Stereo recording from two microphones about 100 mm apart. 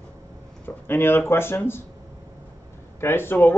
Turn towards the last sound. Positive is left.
turn(degrees=20)  # may be behind; listen again after turning